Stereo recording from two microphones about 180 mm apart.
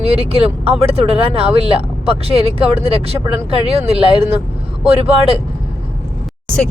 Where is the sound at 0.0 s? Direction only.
35° right (ahead or behind).